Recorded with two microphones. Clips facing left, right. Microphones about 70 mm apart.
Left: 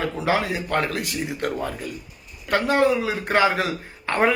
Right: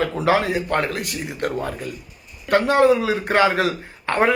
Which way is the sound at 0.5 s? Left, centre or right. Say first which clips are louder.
Right 2 dB; right.